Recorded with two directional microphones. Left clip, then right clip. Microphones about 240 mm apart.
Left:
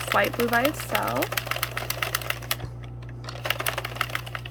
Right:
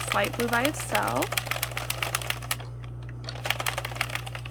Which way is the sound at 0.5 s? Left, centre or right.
Centre.